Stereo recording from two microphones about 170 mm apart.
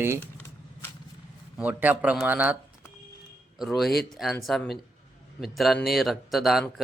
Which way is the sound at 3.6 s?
Centre (ahead or behind).